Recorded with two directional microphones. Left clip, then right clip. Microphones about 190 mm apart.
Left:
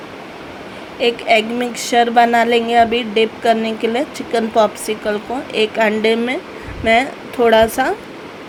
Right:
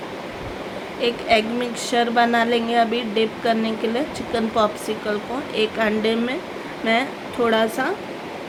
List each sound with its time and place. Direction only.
1.0 s speech: 25° left (ahead or behind)